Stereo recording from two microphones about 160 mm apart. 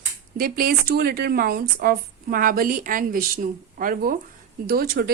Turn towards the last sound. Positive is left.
turn(degrees=-65)  # may be behind; listen again after turning